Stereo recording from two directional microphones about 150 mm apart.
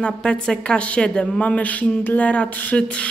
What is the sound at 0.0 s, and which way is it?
A woman's voice, 5° left (ahead or behind).